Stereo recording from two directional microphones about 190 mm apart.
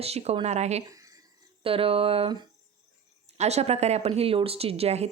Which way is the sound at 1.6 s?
30° right (ahead or behind).